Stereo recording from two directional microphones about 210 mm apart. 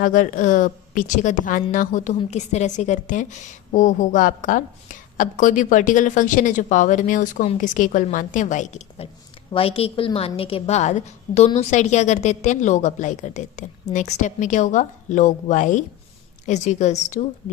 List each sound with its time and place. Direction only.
0.0 s a woman's voice: 40° left (ahead or behind)